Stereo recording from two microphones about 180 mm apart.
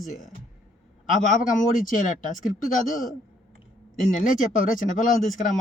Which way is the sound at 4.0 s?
45° left (ahead or behind).